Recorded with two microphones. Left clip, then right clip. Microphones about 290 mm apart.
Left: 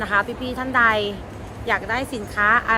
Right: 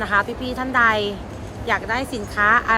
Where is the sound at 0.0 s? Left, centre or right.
Centre.